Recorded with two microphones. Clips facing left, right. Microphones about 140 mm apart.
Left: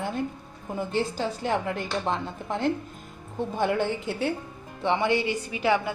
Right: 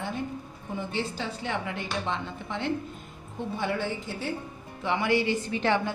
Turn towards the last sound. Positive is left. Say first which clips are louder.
# left 1 dB
turn(degrees=10)  # may be behind; listen again after turning